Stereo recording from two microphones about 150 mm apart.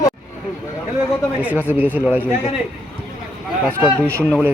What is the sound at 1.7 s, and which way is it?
Speech, 10° right (ahead or behind).